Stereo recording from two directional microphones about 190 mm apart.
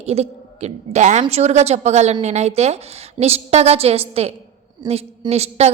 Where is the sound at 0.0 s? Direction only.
35° right (ahead or behind).